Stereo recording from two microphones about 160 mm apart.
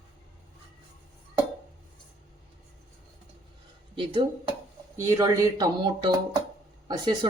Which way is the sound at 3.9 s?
30° right (ahead or behind).